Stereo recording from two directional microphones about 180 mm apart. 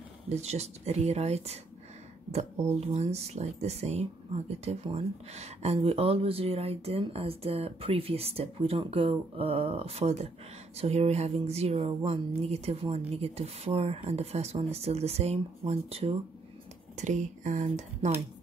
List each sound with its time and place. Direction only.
0.3 s speech: 35° right (ahead or behind)
2.7 s speech: 35° right (ahead or behind)